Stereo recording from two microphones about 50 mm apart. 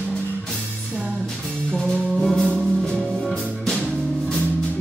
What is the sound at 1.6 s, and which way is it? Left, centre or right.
Music, centre.